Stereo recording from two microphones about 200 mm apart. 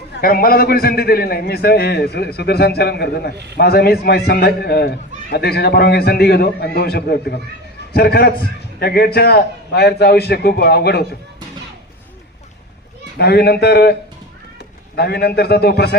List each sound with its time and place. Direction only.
0.2 s a man's voice: 45° left (ahead or behind)
13.1 s a man's voice: 55° left (ahead or behind)
14.9 s a man's voice: 55° left (ahead or behind)